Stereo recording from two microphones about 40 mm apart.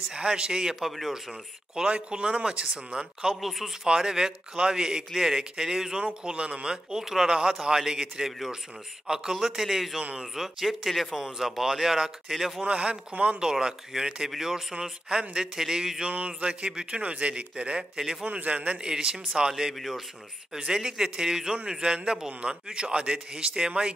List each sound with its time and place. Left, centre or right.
0.1 s a man's voice: right
1.9 s a man's voice: right
3.3 s speech: centre
3.8 s a man's voice: centre
6.2 s a man's voice: right
7.0 s a man's voice: centre
12.6 s a man's voice: right
13.4 s a man's voice: centre
16.1 s a man's voice: right
18.9 s a man's voice: right
19.7 s speech: centre
20.7 s a man's voice: centre